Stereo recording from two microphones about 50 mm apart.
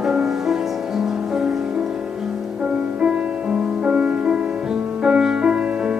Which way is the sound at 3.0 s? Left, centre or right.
Centre.